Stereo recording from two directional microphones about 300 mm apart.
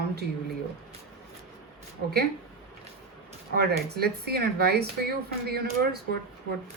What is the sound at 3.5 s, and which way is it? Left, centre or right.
Speech, right.